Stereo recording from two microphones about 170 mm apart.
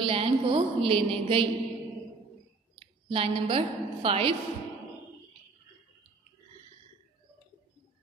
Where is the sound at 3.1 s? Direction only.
30° right (ahead or behind).